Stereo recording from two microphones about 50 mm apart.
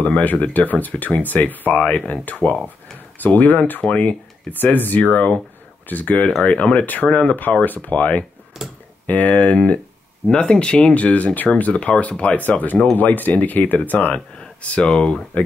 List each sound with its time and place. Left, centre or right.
0.0 s speech: left
4.7 s speech: left
8.6 s speech: centre
9.0 s speech: left
10.3 s speech: centre